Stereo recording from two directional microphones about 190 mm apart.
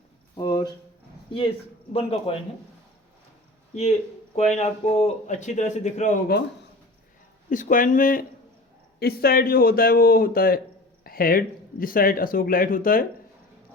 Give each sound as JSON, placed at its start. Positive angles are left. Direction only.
{"t": 0.3, "sound": "a sound", "side_deg": 20}
{"t": 1.9, "sound": "a man's voice", "side_deg": 30}
{"t": 4.4, "sound": "a man's voice", "side_deg": 35}
{"t": 7.5, "sound": "speech", "side_deg": 45}